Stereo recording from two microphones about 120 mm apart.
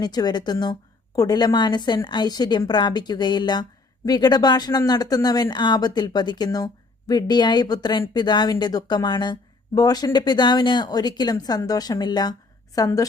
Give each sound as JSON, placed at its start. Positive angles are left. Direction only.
{"t": 0.0, "sound": "a woman's voice", "side_deg": 35}